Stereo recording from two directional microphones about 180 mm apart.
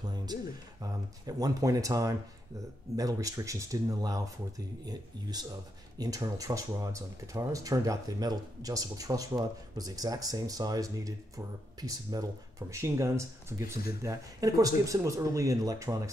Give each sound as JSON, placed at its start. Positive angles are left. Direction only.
{"t": 0.0, "sound": "speech", "side_deg": -20}